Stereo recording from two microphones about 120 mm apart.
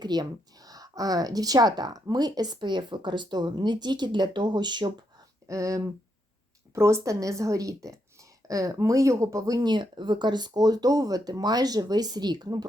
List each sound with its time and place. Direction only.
0.0 s speech: 35° right (ahead or behind)
5.5 s a woman's voice: 25° right (ahead or behind)